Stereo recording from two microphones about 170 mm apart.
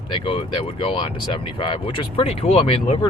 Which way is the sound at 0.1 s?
30° left (ahead or behind).